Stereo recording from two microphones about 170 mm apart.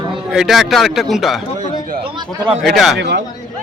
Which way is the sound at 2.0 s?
25° right (ahead or behind).